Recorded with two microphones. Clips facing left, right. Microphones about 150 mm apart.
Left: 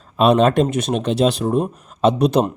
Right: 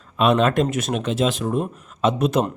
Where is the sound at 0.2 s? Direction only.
35° left (ahead or behind).